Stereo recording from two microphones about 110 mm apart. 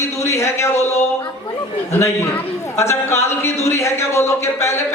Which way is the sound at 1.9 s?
20° left (ahead or behind).